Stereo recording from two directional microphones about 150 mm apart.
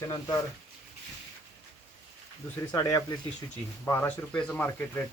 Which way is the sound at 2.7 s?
20° left (ahead or behind).